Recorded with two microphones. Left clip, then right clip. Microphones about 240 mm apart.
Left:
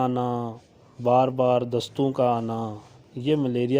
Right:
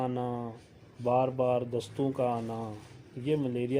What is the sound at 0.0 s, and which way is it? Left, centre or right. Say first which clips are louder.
Speech: left 8 dB; left.